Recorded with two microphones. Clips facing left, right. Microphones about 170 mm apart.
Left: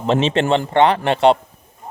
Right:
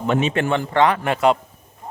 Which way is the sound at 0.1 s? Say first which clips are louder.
Left 4 dB; 25° left (ahead or behind).